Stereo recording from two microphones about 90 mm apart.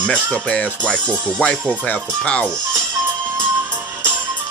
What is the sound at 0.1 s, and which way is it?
Speech, 10° left (ahead or behind).